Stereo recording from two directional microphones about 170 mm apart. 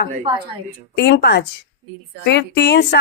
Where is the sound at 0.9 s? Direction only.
80° left.